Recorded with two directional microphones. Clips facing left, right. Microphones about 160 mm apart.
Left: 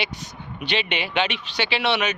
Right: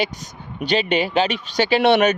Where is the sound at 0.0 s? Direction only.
45° right (ahead or behind).